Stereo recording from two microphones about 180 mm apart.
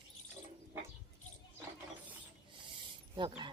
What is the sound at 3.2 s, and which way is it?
Speech, 25° right (ahead or behind).